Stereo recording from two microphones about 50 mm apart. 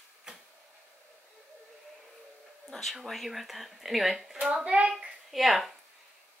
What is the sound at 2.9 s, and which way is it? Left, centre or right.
Speech, centre.